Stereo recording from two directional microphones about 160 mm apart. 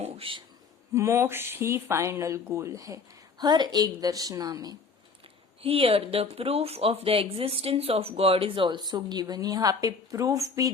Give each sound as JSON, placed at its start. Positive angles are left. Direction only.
{"t": 0.0, "sound": "a sound", "side_deg": -35}
{"t": 0.9, "sound": "speech", "side_deg": -15}
{"t": 5.6, "sound": "speech", "side_deg": -35}